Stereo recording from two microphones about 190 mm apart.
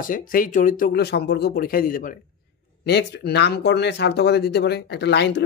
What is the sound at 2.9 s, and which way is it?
Speech, 60° left (ahead or behind).